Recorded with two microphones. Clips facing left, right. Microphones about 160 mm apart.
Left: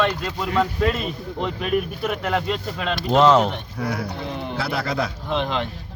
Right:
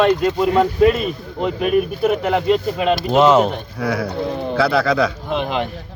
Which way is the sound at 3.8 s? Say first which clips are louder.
Right 7 dB; 90° right.